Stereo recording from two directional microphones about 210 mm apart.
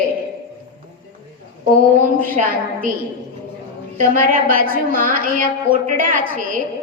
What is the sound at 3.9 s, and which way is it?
A woman's voice, 40° right (ahead or behind).